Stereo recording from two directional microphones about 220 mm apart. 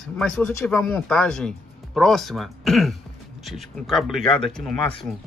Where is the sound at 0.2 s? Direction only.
10° left (ahead or behind).